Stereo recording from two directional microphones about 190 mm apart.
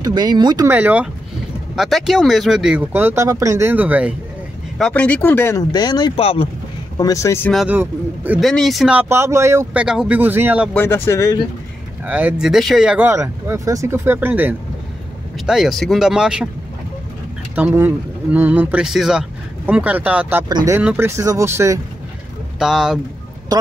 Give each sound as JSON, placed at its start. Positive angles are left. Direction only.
{"t": 0.0, "sound": "speech", "side_deg": -20}
{"t": 0.7, "sound": "speech", "side_deg": -10}
{"t": 4.7, "sound": "speech", "side_deg": 5}
{"t": 7.0, "sound": "speech", "side_deg": 15}
{"t": 7.5, "sound": "speech", "side_deg": -10}
{"t": 8.5, "sound": "speech", "side_deg": 0}
{"t": 10.7, "sound": "speech", "side_deg": 10}
{"t": 12.0, "sound": "speech", "side_deg": -10}
{"t": 17.6, "sound": "speech", "side_deg": -10}
{"t": 22.6, "sound": "speech", "side_deg": -5}
{"t": 23.5, "sound": "speech", "side_deg": -20}